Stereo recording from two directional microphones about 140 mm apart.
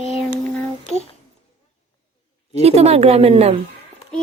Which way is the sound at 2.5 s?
45° right (ahead or behind).